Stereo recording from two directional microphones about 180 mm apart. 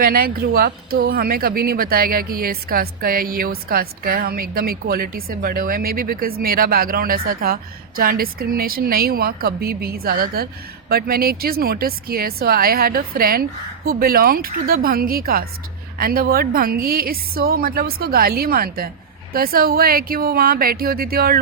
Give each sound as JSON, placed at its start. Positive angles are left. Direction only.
{"t": 0.0, "sound": "speech", "side_deg": -55}